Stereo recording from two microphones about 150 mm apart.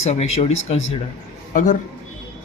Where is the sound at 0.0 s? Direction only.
45° left (ahead or behind).